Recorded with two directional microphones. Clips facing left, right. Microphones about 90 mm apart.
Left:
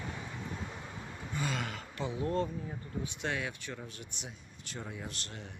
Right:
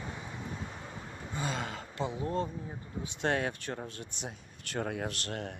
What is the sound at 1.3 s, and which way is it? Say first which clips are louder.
Speech: right 1 dB; 25° right (ahead or behind).